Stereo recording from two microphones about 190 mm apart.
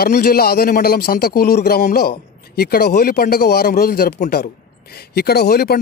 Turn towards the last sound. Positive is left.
turn(degrees=55)  # may be behind; listen again after turning